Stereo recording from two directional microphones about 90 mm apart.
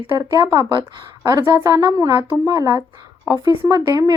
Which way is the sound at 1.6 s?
45° right (ahead or behind).